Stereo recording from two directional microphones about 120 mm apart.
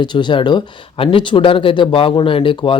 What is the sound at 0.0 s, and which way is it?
Speech, 40° left (ahead or behind).